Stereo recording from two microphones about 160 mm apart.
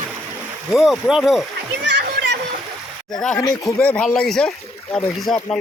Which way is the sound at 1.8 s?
90° right.